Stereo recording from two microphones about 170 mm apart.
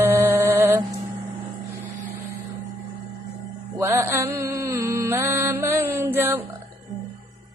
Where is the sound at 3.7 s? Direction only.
15° right (ahead or behind).